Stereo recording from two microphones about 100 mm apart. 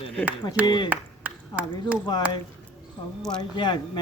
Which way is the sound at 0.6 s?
45° left (ahead or behind).